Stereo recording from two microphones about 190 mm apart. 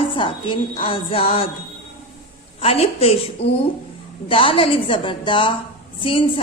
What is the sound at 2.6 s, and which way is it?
A woman's voice, 30° left (ahead or behind).